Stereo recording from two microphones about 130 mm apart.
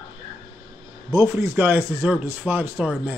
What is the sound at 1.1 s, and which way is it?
A man's voice, 20° right (ahead or behind).